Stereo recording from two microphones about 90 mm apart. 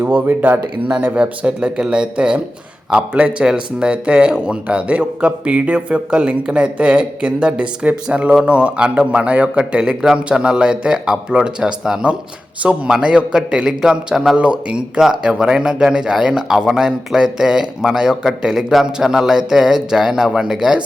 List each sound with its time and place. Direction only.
0.0 s speech: 20° right (ahead or behind)